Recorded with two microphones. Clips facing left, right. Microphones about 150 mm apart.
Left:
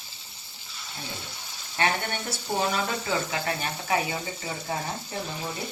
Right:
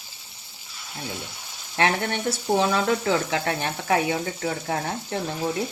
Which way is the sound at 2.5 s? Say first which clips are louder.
Right 6 dB; 65° right (ahead or behind).